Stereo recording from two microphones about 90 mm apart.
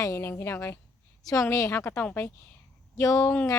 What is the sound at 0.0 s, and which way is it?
A woman's voice, 30° left (ahead or behind).